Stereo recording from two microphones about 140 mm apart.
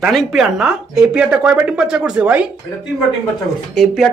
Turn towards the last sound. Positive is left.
turn(degrees=-5)  # may be behind; listen again after turning